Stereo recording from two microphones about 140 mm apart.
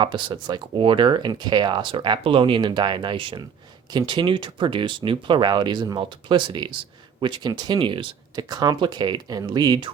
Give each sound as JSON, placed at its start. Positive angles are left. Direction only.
{"t": 0.0, "sound": "speech", "side_deg": -35}